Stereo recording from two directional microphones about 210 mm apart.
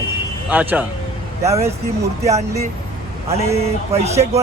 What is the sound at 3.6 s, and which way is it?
Speech, 30° right (ahead or behind).